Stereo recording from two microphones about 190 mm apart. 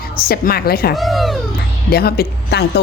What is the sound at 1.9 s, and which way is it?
Speech, 55° left (ahead or behind).